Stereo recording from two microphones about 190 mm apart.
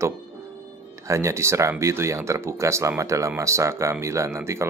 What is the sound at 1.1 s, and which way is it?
Speech, 15° right (ahead or behind).